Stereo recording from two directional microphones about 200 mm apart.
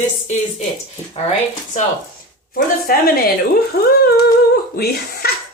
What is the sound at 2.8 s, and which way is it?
Speech, 45° left (ahead or behind).